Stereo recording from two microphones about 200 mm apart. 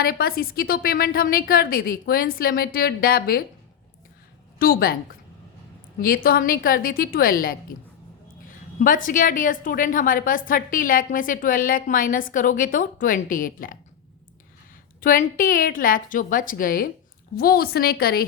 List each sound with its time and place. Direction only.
0.0 s a woman's voice: 50° left (ahead or behind)
4.6 s a woman's voice: 50° left (ahead or behind)
6.0 s a woman's voice: 45° left (ahead or behind)
15.0 s a woman's voice: 45° left (ahead or behind)